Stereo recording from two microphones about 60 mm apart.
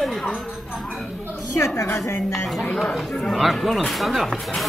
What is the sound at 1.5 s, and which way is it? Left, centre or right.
Speech, left.